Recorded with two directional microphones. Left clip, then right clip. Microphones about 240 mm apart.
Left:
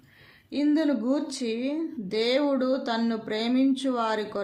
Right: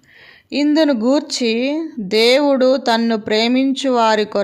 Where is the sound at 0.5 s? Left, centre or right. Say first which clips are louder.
Right 10 dB; right.